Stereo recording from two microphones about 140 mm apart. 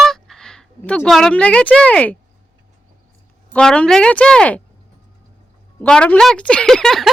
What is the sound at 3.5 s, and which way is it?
Speech, 5° left (ahead or behind).